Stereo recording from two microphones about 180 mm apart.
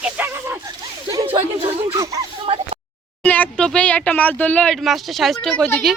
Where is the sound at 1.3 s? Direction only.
30° right (ahead or behind).